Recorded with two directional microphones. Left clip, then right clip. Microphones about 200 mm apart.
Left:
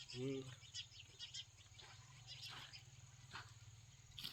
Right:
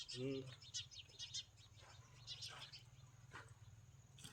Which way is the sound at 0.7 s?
60° right (ahead or behind).